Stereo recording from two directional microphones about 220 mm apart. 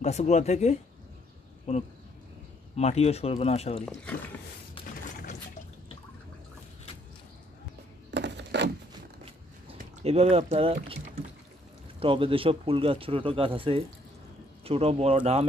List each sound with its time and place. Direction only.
0.0 s speech: 30° left (ahead or behind)
3.8 s speech: 5° left (ahead or behind)
4.8 s a sound: 25° left (ahead or behind)
8.1 s a sound: 50° right (ahead or behind)
9.8 s speech: 30° right (ahead or behind)
12.0 s speech: 25° right (ahead or behind)